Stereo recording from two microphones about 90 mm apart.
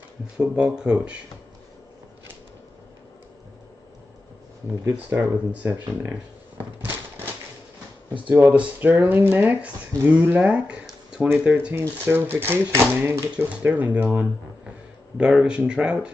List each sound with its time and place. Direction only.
0.4 s speech: 10° right (ahead or behind)
4.8 s speech: 15° right (ahead or behind)
6.6 s door: 20° right (ahead or behind)
8.3 s speech: 15° right (ahead or behind)
11.7 s speech: 25° right (ahead or behind)